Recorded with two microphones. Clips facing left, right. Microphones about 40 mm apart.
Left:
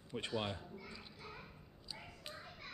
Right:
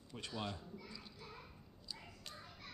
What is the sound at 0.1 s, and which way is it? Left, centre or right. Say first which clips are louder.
A child's voice: left 4 dB; left.